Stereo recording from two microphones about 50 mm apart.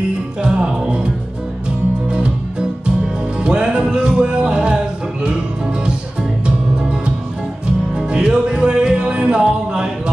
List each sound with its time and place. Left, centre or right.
0.4 s music: centre
3.4 s music: centre
6.4 s music: centre